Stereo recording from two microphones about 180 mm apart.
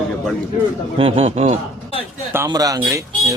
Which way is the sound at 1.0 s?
35° right (ahead or behind).